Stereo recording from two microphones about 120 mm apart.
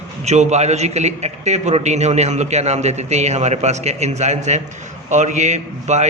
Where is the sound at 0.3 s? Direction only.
70° right (ahead or behind).